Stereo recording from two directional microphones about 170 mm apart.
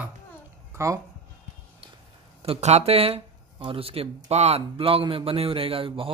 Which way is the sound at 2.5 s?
40° right (ahead or behind).